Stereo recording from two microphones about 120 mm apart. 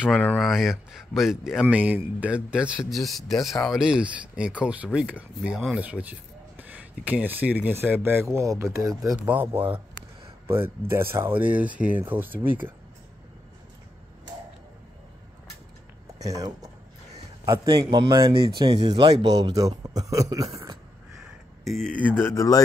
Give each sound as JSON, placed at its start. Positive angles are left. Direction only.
{"t": 0.4, "sound": "speech", "side_deg": 0}
{"t": 9.2, "sound": "speech", "side_deg": -15}
{"t": 16.2, "sound": "speech", "side_deg": -30}
{"t": 21.2, "sound": "speech", "side_deg": 0}